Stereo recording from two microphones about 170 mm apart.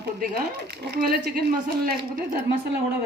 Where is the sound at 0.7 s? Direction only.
65° right (ahead or behind).